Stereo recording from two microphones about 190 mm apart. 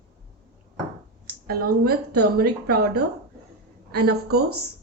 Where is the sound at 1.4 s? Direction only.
55° right (ahead or behind).